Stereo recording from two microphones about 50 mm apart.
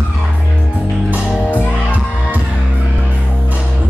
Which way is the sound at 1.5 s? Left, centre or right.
Left.